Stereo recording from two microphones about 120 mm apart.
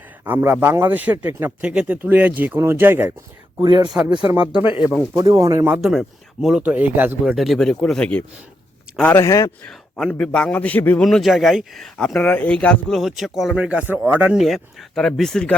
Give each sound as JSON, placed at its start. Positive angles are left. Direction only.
{"t": 0.3, "sound": "a man's voice", "side_deg": -15}
{"t": 3.6, "sound": "speech", "side_deg": -40}
{"t": 4.4, "sound": "a man's voice", "side_deg": -10}
{"t": 5.1, "sound": "speech", "side_deg": -30}
{"t": 5.6, "sound": "speech", "side_deg": -5}
{"t": 6.6, "sound": "a man's voice", "side_deg": -15}
{"t": 7.3, "sound": "speech", "side_deg": 0}
{"t": 9.1, "sound": "speech", "side_deg": 30}
{"t": 10.1, "sound": "a man's voice", "side_deg": 5}
{"t": 11.0, "sound": "speech", "side_deg": 0}
{"t": 14.4, "sound": "speech", "side_deg": 0}